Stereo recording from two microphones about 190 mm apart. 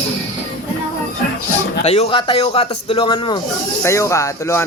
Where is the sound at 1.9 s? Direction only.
30° left (ahead or behind).